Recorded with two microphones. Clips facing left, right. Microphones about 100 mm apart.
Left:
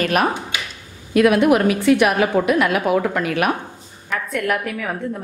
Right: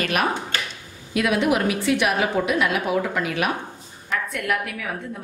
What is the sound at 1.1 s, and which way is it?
A woman's voice, 50° left (ahead or behind).